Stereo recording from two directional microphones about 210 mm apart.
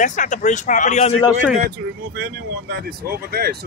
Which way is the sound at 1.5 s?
50° right (ahead or behind).